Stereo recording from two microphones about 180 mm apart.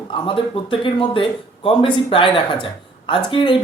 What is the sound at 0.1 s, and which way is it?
Speech, 30° left (ahead or behind).